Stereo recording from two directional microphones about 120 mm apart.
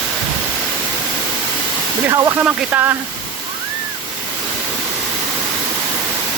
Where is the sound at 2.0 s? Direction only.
20° right (ahead or behind).